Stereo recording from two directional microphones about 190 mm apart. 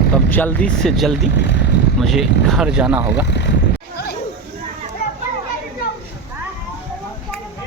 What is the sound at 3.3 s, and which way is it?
Vehicle, 65° left (ahead or behind).